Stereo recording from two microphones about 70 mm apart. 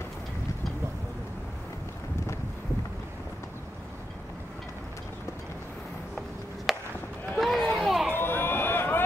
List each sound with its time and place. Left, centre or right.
6.1 s a sound: centre
7.3 s run: centre
8.1 s run: left